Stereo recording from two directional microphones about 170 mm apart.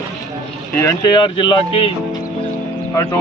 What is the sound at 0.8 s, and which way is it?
Speech, 20° left (ahead or behind).